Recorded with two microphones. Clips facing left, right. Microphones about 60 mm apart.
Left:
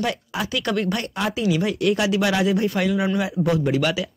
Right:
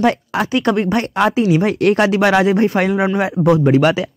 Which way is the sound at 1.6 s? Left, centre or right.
Right.